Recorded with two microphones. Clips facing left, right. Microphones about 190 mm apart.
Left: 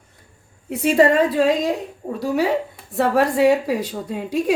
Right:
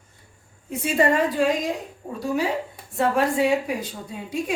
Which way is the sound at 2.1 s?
70° left (ahead or behind).